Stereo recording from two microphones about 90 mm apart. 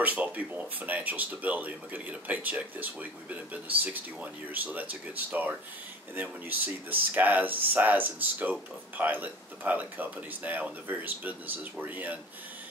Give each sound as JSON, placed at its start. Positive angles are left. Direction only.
{"t": 0.0, "sound": "speech", "side_deg": -15}